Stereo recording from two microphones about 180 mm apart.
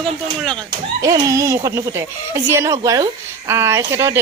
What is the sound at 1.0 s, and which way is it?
Speech, 20° right (ahead or behind).